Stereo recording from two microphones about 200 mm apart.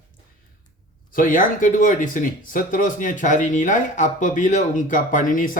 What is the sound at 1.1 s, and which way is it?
Speech, 40° left (ahead or behind).